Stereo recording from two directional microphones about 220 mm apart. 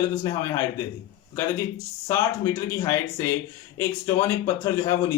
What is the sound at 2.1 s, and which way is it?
Speech, 15° left (ahead or behind).